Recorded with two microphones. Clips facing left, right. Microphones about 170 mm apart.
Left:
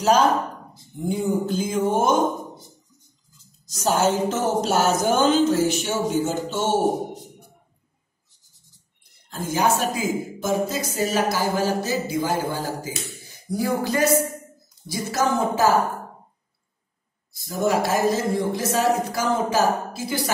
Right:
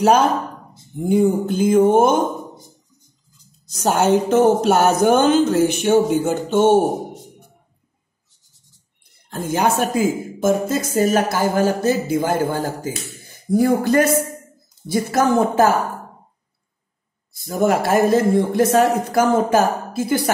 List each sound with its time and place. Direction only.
0.0 s speech: 60° right (ahead or behind)
3.6 s speech: 60° right (ahead or behind)
9.3 s speech: 60° right (ahead or behind)
10.4 s a sound: 55° right (ahead or behind)
14.9 s speech: 60° right (ahead or behind)
17.3 s speech: 55° right (ahead or behind)